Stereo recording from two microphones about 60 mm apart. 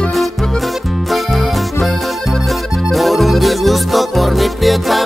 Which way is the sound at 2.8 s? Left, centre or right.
Centre.